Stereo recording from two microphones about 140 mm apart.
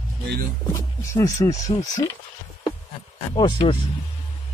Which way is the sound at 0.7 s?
25° left (ahead or behind).